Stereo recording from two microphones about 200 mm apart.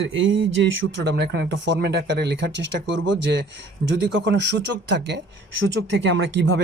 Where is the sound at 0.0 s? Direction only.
70° right (ahead or behind).